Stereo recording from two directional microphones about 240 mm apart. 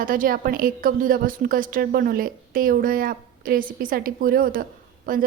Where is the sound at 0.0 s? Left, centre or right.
Right.